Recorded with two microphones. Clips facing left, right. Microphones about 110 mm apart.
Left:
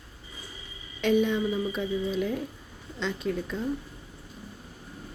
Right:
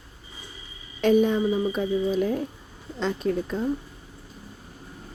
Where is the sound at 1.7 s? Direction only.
45° right (ahead or behind).